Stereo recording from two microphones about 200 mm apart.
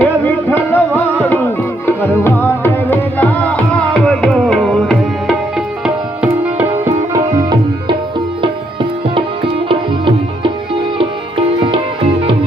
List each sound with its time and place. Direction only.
0.0 s music: 10° left (ahead or behind); by 7.9 s 20° right (ahead or behind)
10.9 s sitar: 25° right (ahead or behind)